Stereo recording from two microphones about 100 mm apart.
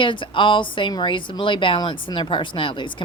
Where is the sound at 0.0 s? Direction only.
55° left (ahead or behind).